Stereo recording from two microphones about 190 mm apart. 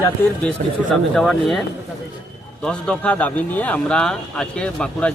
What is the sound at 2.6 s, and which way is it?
Speech, 5° left (ahead or behind).